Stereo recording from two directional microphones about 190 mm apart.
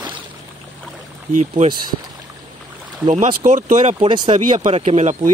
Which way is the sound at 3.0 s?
35° right (ahead or behind).